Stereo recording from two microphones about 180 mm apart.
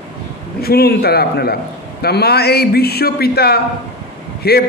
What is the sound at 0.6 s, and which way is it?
A man's voice, 60° left (ahead or behind).